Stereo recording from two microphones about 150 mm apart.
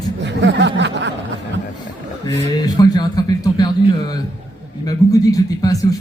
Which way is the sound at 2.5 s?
25° left (ahead or behind).